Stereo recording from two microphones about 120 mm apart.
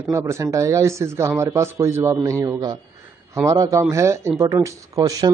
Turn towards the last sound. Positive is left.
turn(degrees=-30)  # may be behind; listen again after turning